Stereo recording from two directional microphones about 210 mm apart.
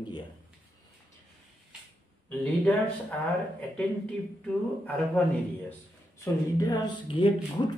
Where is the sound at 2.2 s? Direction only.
10° left (ahead or behind).